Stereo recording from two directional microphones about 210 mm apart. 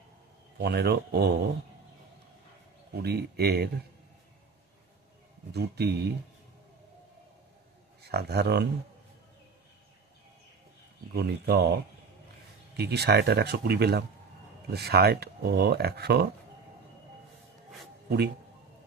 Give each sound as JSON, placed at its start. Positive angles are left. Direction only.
{"t": 0.6, "sound": "speech", "side_deg": -50}
{"t": 2.9, "sound": "speech", "side_deg": -50}
{"t": 5.5, "sound": "speech", "side_deg": -50}
{"t": 8.0, "sound": "speech", "side_deg": -50}
{"t": 11.1, "sound": "speech", "side_deg": -50}
{"t": 12.7, "sound": "speech", "side_deg": -50}